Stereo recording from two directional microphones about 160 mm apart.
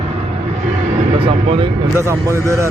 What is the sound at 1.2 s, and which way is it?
Speech, 35° right (ahead or behind).